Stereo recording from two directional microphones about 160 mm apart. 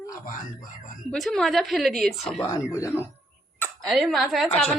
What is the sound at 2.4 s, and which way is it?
Speech, 20° left (ahead or behind).